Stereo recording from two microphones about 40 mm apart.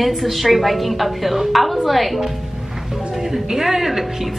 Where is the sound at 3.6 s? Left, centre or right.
Centre.